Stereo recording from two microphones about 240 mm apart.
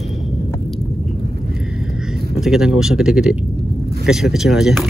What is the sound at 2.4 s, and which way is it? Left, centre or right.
Speech, centre.